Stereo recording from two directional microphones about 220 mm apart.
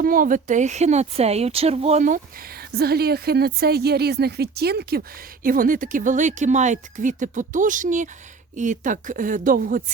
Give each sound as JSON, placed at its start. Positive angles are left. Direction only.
{"t": 0.0, "sound": "a woman's voice", "side_deg": -40}